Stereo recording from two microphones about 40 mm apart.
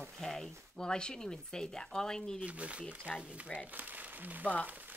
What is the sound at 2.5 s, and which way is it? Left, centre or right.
Speech, right.